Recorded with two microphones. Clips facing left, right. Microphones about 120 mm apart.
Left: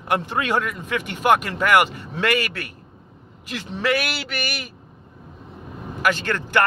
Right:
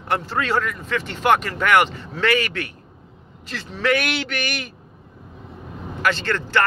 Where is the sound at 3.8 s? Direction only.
5° left (ahead or behind).